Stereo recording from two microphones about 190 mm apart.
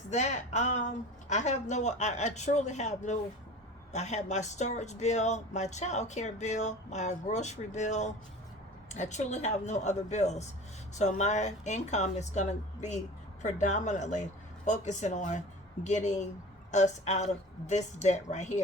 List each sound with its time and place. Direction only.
0.1 s speech: 40° left (ahead or behind)